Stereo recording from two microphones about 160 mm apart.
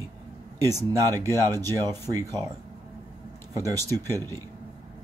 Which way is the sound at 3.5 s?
20° right (ahead or behind).